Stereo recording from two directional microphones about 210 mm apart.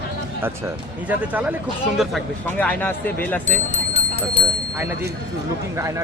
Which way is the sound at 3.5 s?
30° left (ahead or behind).